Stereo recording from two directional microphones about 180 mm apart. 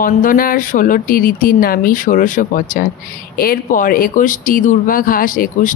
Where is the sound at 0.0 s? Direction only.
50° left (ahead or behind).